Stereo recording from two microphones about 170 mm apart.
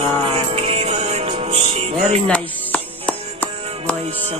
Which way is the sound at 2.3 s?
5° left (ahead or behind).